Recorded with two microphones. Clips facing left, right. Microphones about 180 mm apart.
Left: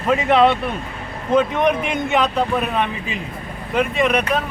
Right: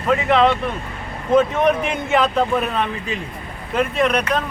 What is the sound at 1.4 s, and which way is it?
Speech, 5° right (ahead or behind).